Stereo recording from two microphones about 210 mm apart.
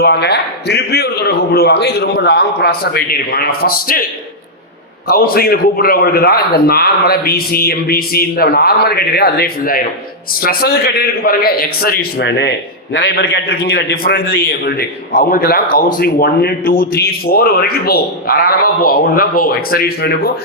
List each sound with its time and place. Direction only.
0.0 s a man's voice: 50° left (ahead or behind)
5.0 s a man's voice: 45° left (ahead or behind)